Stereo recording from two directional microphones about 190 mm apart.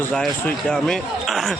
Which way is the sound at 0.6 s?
5° left (ahead or behind).